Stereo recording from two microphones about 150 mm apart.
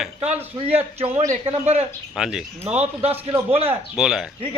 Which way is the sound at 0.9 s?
40° right (ahead or behind).